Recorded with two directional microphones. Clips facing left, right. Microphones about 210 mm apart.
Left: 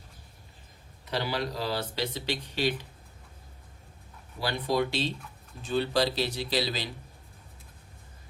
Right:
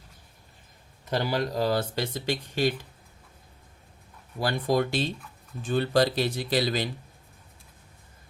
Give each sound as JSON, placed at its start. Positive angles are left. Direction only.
{"t": 1.0, "sound": "speech", "side_deg": -45}
{"t": 4.4, "sound": "speech", "side_deg": -50}